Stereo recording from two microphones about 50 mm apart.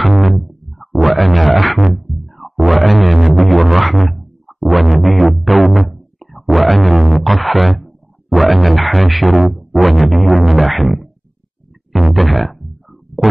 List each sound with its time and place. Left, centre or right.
0.0 s music: centre
7.0 s a sound: centre
8.4 s music: centre
12.1 s music: centre